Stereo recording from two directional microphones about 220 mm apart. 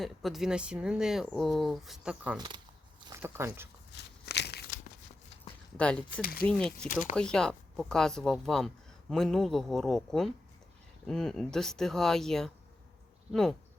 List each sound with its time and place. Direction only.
0.0 s speech: centre (ahead or behind)
3.9 s a sound: 50° left (ahead or behind)
5.7 s speech: 5° left (ahead or behind)
6.8 s speech: 35° left (ahead or behind)
7.2 s speech: 5° left (ahead or behind)